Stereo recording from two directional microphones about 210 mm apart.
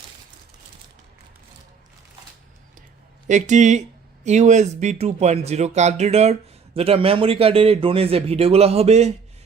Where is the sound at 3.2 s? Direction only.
35° right (ahead or behind).